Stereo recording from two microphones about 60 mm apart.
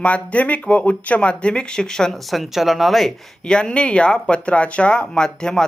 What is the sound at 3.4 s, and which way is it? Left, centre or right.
Speech, centre.